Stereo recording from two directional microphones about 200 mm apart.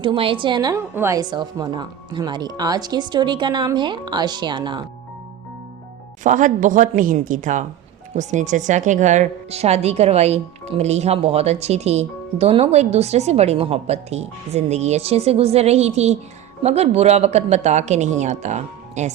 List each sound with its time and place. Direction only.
0.0 s a woman's voice: 25° right (ahead or behind)
6.2 s speech: 40° right (ahead or behind)